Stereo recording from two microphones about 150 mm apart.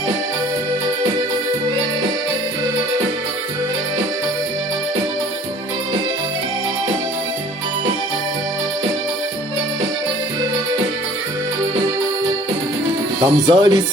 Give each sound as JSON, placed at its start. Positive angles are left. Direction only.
{"t": 13.2, "sound": "speech", "side_deg": -30}